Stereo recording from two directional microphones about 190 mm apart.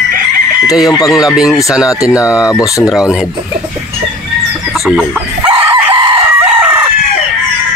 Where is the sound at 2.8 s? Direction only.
5° right (ahead or behind).